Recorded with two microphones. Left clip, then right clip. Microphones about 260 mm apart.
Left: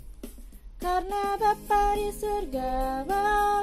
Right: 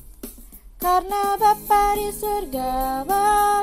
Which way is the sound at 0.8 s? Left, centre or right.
Right.